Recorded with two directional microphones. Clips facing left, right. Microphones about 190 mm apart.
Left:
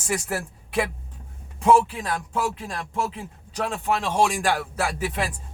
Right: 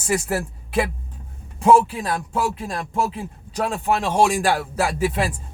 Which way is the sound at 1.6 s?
35° right (ahead or behind).